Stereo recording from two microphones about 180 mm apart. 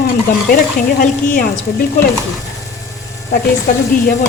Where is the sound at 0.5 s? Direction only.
50° left (ahead or behind).